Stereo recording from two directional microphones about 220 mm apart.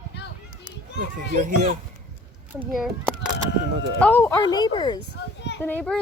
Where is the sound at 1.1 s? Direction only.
35° right (ahead or behind).